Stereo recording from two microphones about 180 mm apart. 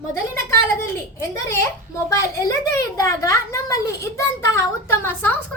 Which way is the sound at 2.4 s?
15° left (ahead or behind).